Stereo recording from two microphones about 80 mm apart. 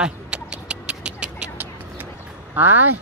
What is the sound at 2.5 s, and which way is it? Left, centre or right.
Speech, right.